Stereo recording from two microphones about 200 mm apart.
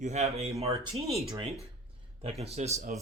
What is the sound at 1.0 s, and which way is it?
Speech, 30° right (ahead or behind).